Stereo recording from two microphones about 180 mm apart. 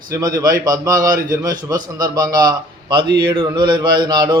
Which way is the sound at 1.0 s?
50° right (ahead or behind).